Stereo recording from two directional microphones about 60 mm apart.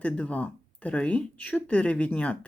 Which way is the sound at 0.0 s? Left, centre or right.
Left.